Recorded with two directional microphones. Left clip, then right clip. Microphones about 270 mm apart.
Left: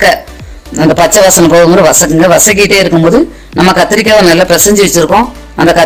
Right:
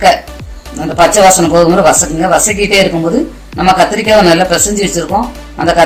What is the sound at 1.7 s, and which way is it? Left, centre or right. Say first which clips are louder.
Speech: left 3 dB; left.